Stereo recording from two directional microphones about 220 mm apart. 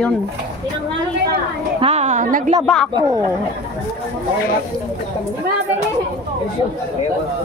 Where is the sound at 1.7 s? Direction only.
30° right (ahead or behind).